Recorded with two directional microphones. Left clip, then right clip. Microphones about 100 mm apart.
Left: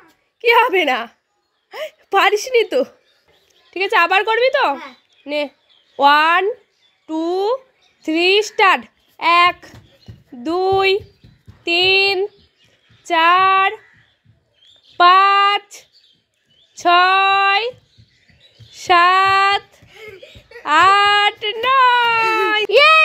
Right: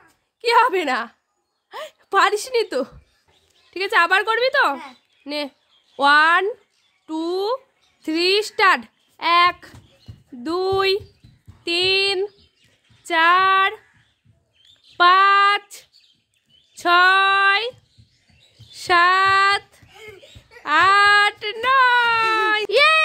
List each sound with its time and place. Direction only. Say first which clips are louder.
0.4 s a child's voice: left 3 dB; 10° right (ahead or behind)
18.9 s speech: left 3 dB; 5° right (ahead or behind)
22.7 s a sound: left 6 dB; centre (ahead or behind)